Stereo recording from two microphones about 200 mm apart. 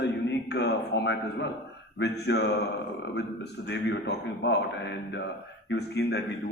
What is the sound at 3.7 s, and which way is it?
A man's voice, 60° left (ahead or behind).